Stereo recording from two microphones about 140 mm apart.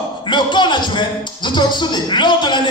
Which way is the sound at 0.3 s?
35° left (ahead or behind).